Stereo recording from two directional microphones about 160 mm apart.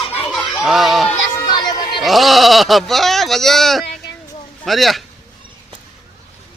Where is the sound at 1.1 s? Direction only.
15° left (ahead or behind).